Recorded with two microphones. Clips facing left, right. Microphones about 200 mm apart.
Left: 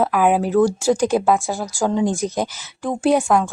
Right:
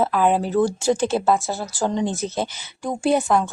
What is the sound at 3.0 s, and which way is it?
Speech, centre (ahead or behind).